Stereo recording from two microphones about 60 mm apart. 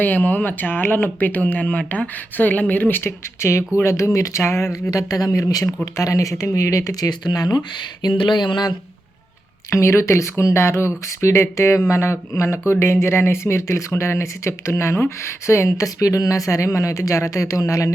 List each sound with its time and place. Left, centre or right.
0.0 s speech: left
3.8 s speech: left
4.9 s speech: left
5.8 s speech: left
9.6 s speech: left